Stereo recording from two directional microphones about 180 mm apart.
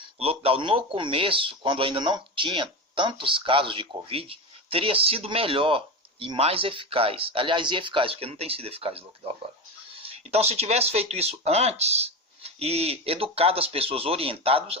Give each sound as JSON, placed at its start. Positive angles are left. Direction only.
{"t": 0.2, "sound": "speech", "side_deg": -35}